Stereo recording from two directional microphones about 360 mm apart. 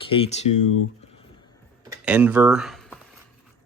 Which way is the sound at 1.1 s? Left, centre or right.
Centre.